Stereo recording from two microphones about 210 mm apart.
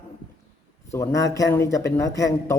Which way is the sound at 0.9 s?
15° left (ahead or behind).